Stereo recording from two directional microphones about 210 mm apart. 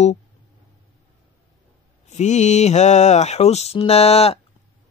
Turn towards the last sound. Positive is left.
turn(degrees=30)  # may be behind; listen again after turning